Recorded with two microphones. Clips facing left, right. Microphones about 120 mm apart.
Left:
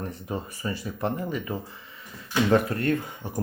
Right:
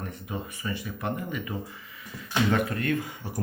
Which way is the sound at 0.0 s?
35° left (ahead or behind).